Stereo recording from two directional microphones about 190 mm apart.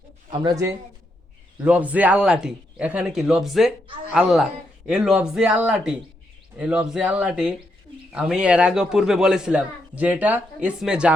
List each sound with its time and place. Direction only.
0.4 s speech: 20° right (ahead or behind)
1.6 s a man's voice: 5° right (ahead or behind)